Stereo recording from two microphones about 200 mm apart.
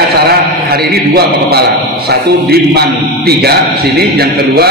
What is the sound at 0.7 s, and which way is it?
A man's voice, 50° right (ahead or behind).